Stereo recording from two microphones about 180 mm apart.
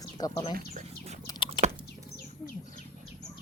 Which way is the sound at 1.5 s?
40° right (ahead or behind).